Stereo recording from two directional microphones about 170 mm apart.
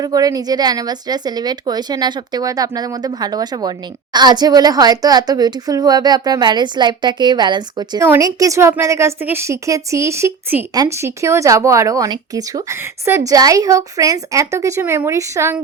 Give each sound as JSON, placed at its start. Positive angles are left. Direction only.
{"t": 0.0, "sound": "a woman's voice", "side_deg": -20}